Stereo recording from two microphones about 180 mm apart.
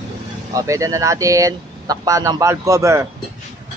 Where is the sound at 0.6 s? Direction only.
20° right (ahead or behind).